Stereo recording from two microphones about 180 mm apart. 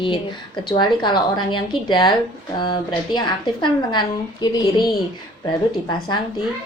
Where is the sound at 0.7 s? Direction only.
25° left (ahead or behind).